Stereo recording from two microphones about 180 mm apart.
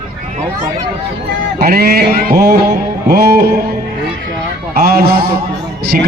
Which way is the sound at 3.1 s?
60° right (ahead or behind).